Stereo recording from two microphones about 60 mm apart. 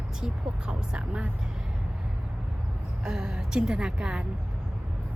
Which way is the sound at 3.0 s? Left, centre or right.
Centre.